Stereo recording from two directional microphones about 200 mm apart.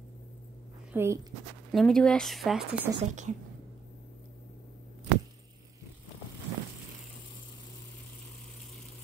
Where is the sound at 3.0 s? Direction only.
40° right (ahead or behind).